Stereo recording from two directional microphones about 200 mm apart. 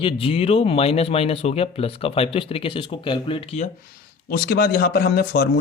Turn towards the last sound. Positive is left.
turn(degrees=50)  # may be behind; listen again after turning